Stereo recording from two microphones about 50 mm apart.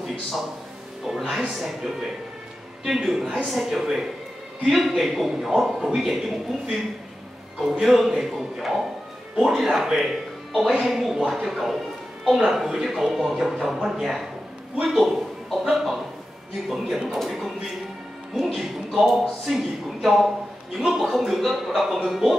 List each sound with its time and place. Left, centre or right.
1.0 s a man's voice: centre
7.6 s speech: centre